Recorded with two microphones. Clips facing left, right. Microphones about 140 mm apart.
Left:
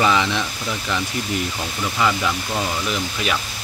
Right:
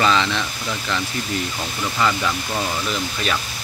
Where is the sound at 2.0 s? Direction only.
5° left (ahead or behind).